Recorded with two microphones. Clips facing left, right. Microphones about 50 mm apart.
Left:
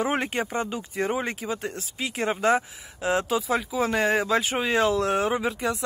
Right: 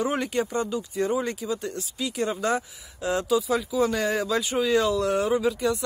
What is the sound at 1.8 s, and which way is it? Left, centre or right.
Speech, left.